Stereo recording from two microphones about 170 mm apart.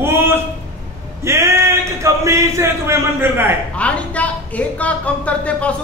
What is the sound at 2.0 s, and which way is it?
A man's voice, 15° right (ahead or behind).